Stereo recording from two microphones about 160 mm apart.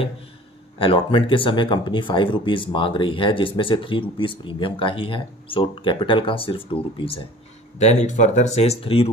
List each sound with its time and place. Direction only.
0.7 s speech: 30° left (ahead or behind)
7.8 s speech: 45° left (ahead or behind)